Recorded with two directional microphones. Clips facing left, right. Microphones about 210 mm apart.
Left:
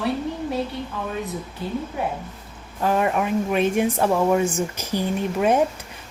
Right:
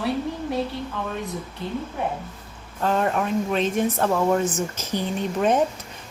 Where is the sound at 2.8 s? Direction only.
10° left (ahead or behind).